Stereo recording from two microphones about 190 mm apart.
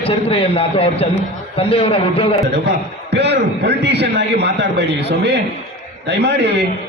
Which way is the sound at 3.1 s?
60° right (ahead or behind).